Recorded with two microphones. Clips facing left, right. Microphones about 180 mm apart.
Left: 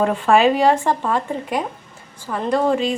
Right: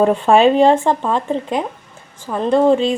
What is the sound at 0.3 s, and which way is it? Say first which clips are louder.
A woman's voice: right 3 dB; 20° right (ahead or behind).